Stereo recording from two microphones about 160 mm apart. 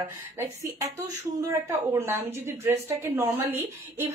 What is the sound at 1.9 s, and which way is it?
A woman's voice, 15° right (ahead or behind).